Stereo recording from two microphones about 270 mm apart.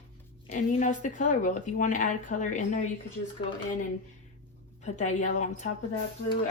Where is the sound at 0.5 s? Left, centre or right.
Left.